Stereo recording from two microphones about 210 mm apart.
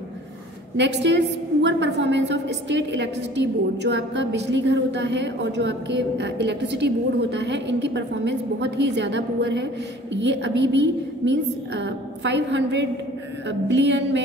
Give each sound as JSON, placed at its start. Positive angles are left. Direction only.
{"t": 0.7, "sound": "a woman's voice", "side_deg": -55}